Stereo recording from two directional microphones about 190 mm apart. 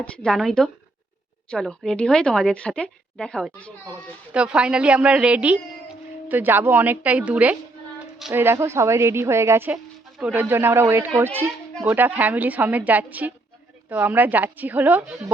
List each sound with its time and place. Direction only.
0.0 s speech: 5° left (ahead or behind)
4.3 s a woman's voice: 5° right (ahead or behind)